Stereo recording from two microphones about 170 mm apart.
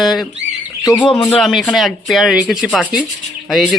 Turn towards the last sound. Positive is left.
turn(degrees=0)  # may be behind; listen again after turning